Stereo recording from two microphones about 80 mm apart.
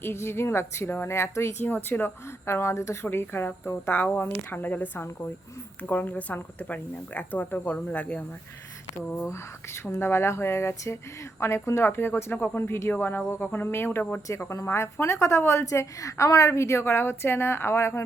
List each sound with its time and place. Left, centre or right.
0.0 s a woman's voice: left
1.6 s speech: left
9.0 s a woman's voice: left
14.5 s a woman's voice: left